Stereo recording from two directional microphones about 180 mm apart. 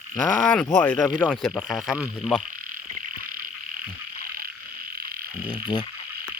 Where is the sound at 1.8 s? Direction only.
15° left (ahead or behind).